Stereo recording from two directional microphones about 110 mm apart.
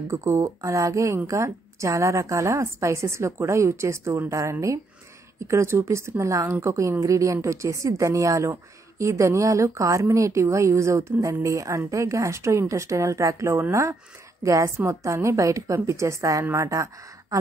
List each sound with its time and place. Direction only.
0.1 s a woman's voice: 25° right (ahead or behind)